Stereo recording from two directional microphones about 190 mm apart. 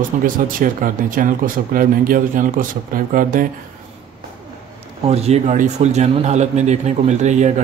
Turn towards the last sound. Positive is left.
turn(degrees=-40)  # may be behind; listen again after turning